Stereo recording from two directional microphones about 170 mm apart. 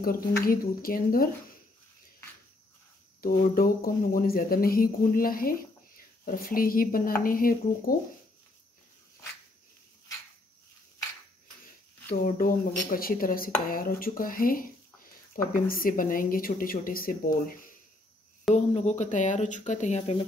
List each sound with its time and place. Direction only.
0.0 s speech: 60° left (ahead or behind)
3.2 s speech: 60° left (ahead or behind)
12.1 s speech: 55° left (ahead or behind)
18.5 s speech: 45° left (ahead or behind)